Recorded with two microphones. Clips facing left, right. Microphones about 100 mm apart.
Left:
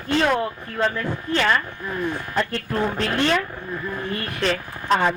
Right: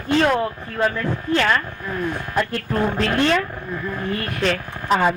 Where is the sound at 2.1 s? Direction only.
10° right (ahead or behind).